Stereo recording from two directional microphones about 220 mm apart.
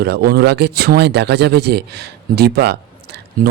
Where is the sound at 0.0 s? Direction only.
45° right (ahead or behind).